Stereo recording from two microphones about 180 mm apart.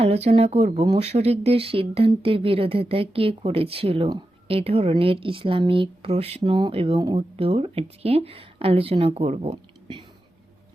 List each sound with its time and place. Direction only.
0.0 s speech: 35° right (ahead or behind)